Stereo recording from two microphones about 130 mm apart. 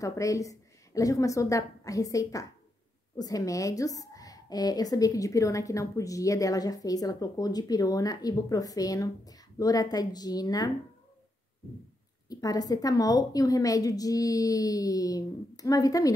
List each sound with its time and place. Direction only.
0.0 s a woman's voice: 25° left (ahead or behind)
12.3 s a woman's voice: 30° left (ahead or behind)